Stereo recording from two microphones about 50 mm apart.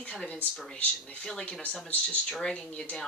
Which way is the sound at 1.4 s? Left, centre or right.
Left.